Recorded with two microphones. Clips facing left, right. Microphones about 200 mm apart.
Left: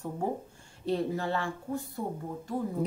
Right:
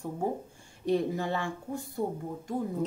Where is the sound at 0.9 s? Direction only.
15° right (ahead or behind).